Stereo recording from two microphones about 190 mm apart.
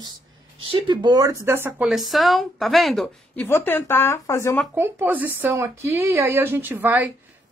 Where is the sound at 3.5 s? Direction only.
10° left (ahead or behind).